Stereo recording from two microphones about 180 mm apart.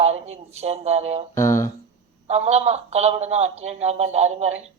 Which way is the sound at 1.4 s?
15° left (ahead or behind).